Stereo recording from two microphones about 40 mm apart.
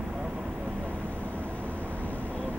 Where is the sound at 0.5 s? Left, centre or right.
Right.